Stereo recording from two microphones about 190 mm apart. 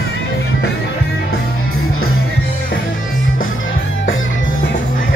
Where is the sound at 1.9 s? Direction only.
90° left.